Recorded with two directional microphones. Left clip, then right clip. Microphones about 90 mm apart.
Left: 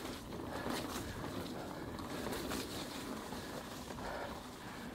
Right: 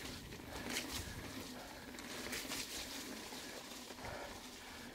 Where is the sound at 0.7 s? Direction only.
30° right (ahead or behind).